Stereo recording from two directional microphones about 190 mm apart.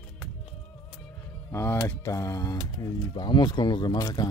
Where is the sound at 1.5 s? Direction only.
15° left (ahead or behind).